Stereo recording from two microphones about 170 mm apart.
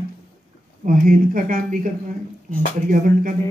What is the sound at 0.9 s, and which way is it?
Speech, 50° right (ahead or behind).